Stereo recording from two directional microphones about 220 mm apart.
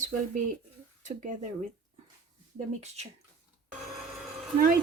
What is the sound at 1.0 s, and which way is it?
Speech, 35° right (ahead or behind).